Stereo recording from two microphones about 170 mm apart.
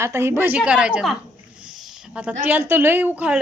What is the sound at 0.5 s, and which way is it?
Speech, 5° right (ahead or behind).